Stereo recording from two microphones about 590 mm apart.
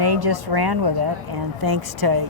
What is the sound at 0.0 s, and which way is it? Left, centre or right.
Speech, right.